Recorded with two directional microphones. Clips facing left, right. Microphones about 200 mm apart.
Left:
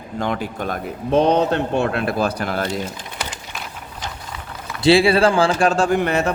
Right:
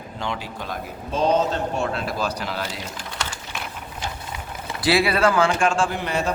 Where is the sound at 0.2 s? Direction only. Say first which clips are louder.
Left 7 dB; 50° left (ahead or behind).